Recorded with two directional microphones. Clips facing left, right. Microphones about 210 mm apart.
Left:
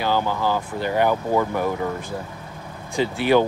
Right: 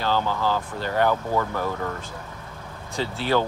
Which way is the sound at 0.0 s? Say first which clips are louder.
Left 2 dB; 15° left (ahead or behind).